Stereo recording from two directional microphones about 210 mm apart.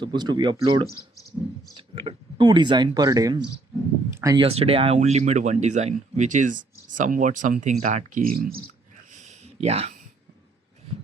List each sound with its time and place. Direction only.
0.0 s speech: 20° right (ahead or behind)
4.4 s speech: 30° right (ahead or behind); by 8.5 s 45° right (ahead or behind)
9.1 s a sound: 35° right (ahead or behind)